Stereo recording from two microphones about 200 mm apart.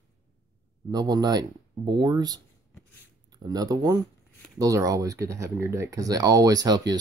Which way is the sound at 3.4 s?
20° right (ahead or behind).